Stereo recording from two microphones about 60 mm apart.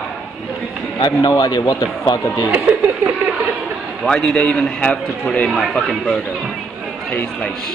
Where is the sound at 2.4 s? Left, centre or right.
Right.